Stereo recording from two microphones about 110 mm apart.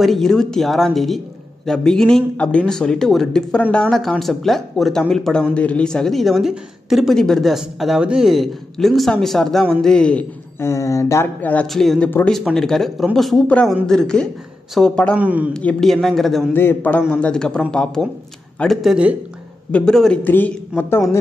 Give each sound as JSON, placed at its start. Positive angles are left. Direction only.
{"t": 0.0, "sound": "speech", "side_deg": 0}
{"t": 10.6, "sound": "speech", "side_deg": 25}
{"t": 11.6, "sound": "speech", "side_deg": 0}
{"t": 15.1, "sound": "a man's voice", "side_deg": -15}
{"t": 15.5, "sound": "speech", "side_deg": 5}
{"t": 16.5, "sound": "speech", "side_deg": 15}
{"t": 20.2, "sound": "speech", "side_deg": 15}